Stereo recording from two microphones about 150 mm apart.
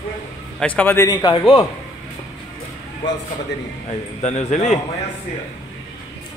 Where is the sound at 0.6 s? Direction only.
10° left (ahead or behind).